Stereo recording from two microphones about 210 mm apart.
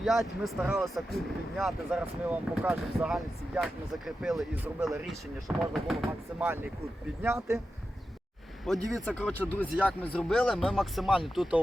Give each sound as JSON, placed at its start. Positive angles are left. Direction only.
{"t": 0.0, "sound": "speech", "side_deg": 0}
{"t": 6.4, "sound": "speech", "side_deg": -10}
{"t": 8.9, "sound": "speech", "side_deg": 5}